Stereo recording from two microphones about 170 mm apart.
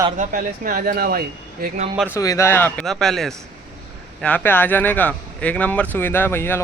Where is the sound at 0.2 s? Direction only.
50° right (ahead or behind).